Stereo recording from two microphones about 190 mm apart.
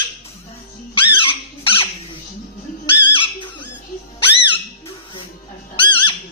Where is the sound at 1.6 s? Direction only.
30° left (ahead or behind).